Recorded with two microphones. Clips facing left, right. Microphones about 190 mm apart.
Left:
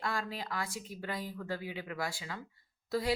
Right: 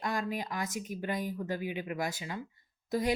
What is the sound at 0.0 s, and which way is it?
Speech, 20° right (ahead or behind).